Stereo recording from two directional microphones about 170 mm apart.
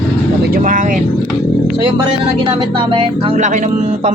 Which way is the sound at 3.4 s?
45° right (ahead or behind).